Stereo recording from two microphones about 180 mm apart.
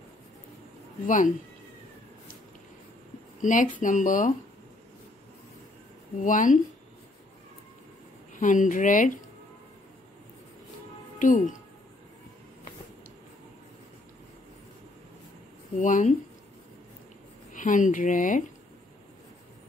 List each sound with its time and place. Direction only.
1.0 s speech: 45° left (ahead or behind)
3.4 s speech: 45° left (ahead or behind)
6.2 s speech: 45° left (ahead or behind)
8.4 s speech: 45° left (ahead or behind)
11.1 s speech: 45° left (ahead or behind)
15.8 s speech: 45° left (ahead or behind)
17.5 s speech: 45° left (ahead or behind)